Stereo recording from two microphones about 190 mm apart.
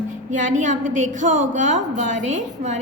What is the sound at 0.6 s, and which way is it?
A woman's voice, 40° right (ahead or behind).